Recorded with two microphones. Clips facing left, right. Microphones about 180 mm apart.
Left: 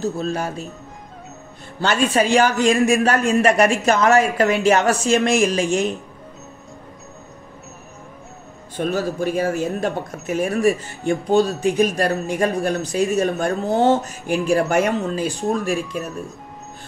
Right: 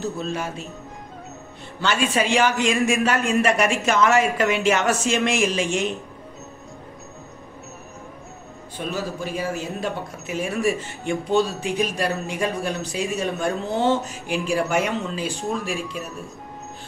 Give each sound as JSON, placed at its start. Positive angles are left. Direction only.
{"t": 0.0, "sound": "a man's voice", "side_deg": 35}
{"t": 1.8, "sound": "a man's voice", "side_deg": 40}
{"t": 8.7, "sound": "speech", "side_deg": 50}